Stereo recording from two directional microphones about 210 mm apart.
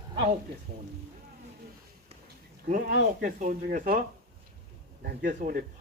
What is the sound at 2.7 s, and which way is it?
Speech, 45° right (ahead or behind).